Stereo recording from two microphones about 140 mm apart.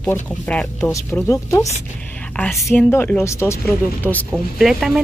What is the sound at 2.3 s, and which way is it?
Speech, 5° left (ahead or behind).